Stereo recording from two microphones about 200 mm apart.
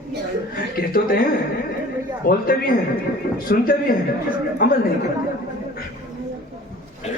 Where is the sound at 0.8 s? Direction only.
45° left (ahead or behind).